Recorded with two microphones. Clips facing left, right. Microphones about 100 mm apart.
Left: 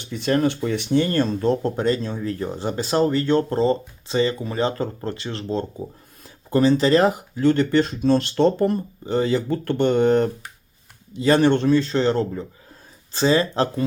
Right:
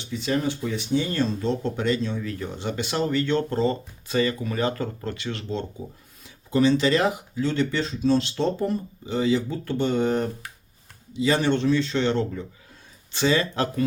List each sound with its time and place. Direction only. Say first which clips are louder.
0.0 s speech: left 5 dB; 55° left (ahead or behind); by 13.8 s 30° left (ahead or behind)